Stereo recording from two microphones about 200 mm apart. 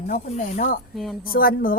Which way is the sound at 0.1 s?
40° left (ahead or behind).